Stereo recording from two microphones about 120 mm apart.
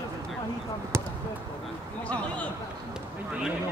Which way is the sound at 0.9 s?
25° right (ahead or behind).